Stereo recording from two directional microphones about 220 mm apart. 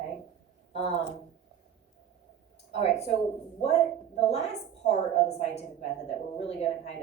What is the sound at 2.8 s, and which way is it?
Speech, 30° left (ahead or behind).